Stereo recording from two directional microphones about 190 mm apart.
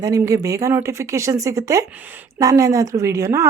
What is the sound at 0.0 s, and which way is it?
A woman's voice, 20° right (ahead or behind).